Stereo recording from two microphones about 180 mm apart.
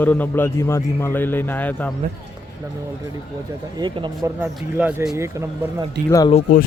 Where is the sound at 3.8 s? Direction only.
25° right (ahead or behind).